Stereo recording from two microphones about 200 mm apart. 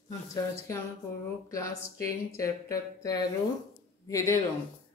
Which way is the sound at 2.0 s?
15° left (ahead or behind).